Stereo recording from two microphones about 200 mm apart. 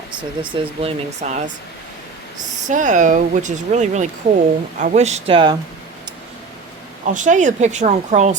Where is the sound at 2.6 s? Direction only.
40° right (ahead or behind).